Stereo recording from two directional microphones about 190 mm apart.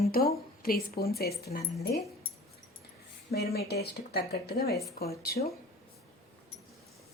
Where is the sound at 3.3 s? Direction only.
55° left (ahead or behind).